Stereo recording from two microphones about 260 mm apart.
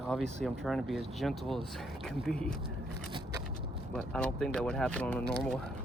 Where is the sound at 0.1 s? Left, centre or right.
Centre.